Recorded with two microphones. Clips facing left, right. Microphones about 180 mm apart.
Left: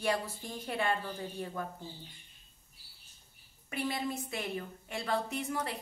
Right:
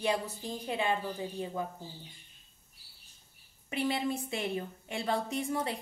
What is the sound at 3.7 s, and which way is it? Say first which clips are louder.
A woman's voice: right 3 dB; 25° right (ahead or behind).